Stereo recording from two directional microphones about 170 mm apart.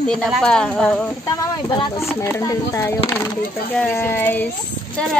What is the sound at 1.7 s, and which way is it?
Speech, 20° left (ahead or behind).